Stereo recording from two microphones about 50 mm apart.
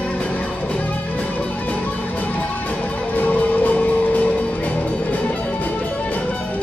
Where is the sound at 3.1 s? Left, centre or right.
Left.